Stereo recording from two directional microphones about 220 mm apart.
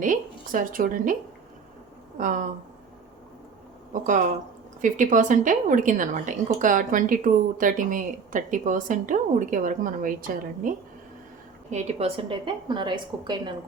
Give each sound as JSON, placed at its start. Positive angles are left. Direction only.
{"t": 0.0, "sound": "a woman's voice", "side_deg": -35}
{"t": 2.1, "sound": "a woman's voice", "side_deg": -35}
{"t": 3.9, "sound": "a woman's voice", "side_deg": -35}
{"t": 11.7, "sound": "a woman's voice", "side_deg": -25}